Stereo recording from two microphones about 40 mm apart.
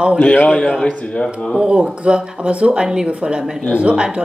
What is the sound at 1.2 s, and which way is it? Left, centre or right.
Speech, centre.